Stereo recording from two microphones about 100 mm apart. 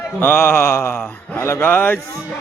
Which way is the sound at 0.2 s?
20° left (ahead or behind).